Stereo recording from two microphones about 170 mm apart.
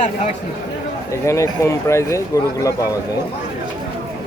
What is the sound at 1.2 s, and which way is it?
Speech, 15° left (ahead or behind).